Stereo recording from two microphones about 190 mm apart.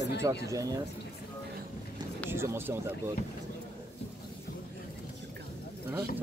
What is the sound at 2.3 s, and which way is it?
Speech, 10° right (ahead or behind).